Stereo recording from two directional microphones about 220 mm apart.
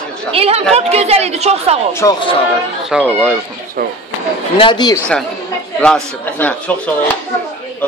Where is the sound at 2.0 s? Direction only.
10° left (ahead or behind).